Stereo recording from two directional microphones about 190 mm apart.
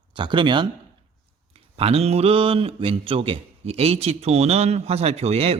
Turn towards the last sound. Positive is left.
turn(degrees=-30)  # may be behind; listen again after turning